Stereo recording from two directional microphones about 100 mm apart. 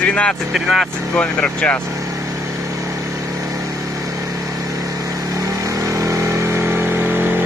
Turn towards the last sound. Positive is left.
turn(degrees=-25)  # may be behind; listen again after turning